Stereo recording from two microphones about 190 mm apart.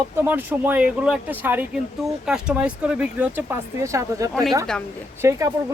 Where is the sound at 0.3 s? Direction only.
10° right (ahead or behind).